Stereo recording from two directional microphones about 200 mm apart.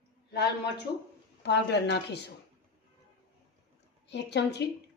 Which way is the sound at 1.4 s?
60° left (ahead or behind).